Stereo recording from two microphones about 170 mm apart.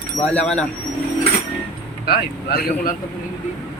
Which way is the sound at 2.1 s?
60° left (ahead or behind).